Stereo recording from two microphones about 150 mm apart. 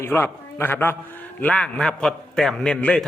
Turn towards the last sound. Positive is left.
turn(degrees=5)  # may be behind; listen again after turning